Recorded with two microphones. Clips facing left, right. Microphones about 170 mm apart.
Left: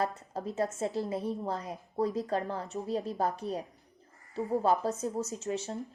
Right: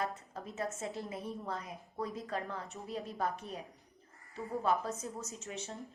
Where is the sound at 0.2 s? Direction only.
35° left (ahead or behind).